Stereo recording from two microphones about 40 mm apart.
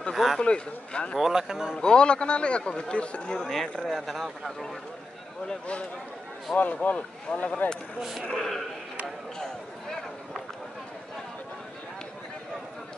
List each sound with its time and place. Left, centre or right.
0.1 s speech: centre
0.4 s a man's voice: left
1.2 s speech: centre
1.8 s a man's voice: left
3.3 s speech: centre
3.8 s speech: centre
6.5 s speech: left
8.4 s speech: centre
9.4 s a sound: centre